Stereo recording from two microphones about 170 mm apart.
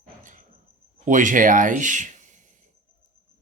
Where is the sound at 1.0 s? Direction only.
50° right (ahead or behind).